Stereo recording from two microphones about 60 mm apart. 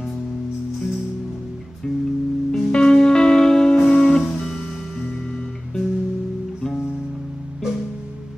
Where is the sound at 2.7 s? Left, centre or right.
Centre.